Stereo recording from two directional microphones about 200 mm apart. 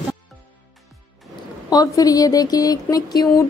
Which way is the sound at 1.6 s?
20° left (ahead or behind).